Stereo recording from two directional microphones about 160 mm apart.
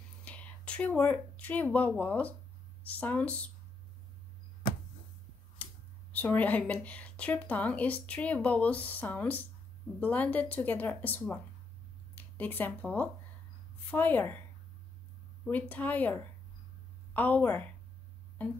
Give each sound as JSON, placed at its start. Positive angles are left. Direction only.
{"t": 0.2, "sound": "whispering", "side_deg": 10}
{"t": 1.1, "sound": "a woman's voice", "side_deg": 10}
{"t": 6.1, "sound": "a woman's voice", "side_deg": 10}
{"t": 15.4, "sound": "a woman's voice", "side_deg": 10}